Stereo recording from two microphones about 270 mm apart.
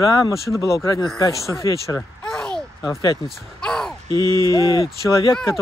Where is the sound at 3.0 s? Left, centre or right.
Centre.